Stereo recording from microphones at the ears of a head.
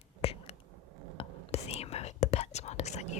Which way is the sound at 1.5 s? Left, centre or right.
Left.